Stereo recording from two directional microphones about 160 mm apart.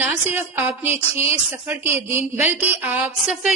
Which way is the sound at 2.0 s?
40° left (ahead or behind).